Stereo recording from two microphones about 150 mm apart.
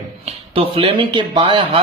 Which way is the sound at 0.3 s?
40° right (ahead or behind).